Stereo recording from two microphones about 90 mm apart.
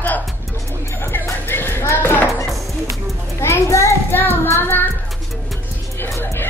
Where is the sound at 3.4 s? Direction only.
30° left (ahead or behind).